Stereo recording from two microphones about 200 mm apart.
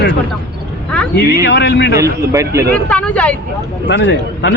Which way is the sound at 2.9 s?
5° left (ahead or behind).